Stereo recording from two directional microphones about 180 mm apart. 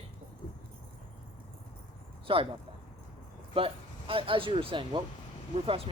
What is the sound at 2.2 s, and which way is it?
Speech, 30° right (ahead or behind).